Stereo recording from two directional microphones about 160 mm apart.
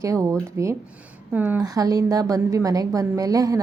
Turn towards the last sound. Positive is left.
turn(degrees=-20)  # may be behind; listen again after turning